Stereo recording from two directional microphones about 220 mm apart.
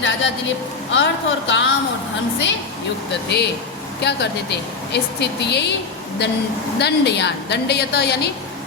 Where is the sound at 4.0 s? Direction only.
50° left (ahead or behind).